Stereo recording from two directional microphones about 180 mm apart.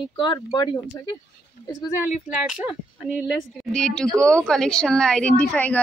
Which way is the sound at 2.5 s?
10° right (ahead or behind).